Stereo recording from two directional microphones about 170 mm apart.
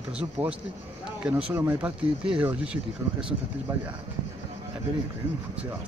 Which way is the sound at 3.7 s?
20° right (ahead or behind).